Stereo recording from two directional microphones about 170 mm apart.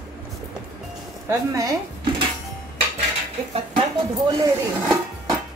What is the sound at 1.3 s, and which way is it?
Speech, 20° right (ahead or behind).